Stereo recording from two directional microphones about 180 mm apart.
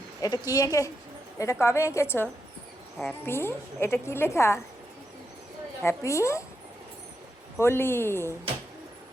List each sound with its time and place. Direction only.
0.2 s a woman's voice: 20° left (ahead or behind)
5.8 s a woman's voice: 15° left (ahead or behind)
7.6 s a woman's voice: 15° left (ahead or behind)